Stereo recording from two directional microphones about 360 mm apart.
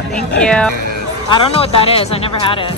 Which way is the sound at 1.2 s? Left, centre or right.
Centre.